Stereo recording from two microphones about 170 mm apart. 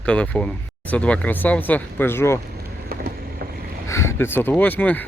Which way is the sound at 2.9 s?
65° right (ahead or behind).